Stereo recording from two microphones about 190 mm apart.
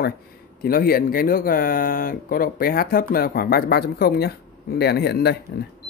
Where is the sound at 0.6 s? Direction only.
50° left (ahead or behind).